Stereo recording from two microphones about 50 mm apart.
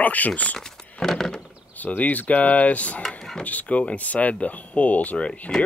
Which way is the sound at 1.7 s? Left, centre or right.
Left.